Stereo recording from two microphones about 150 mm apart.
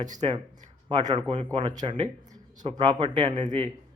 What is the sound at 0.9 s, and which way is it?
Speech, 30° right (ahead or behind).